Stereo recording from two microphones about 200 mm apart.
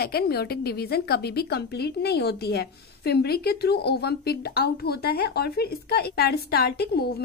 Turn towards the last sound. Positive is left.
turn(degrees=50)  # may be behind; listen again after turning